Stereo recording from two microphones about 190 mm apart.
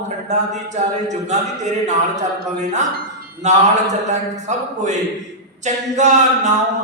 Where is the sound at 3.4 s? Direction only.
35° right (ahead or behind).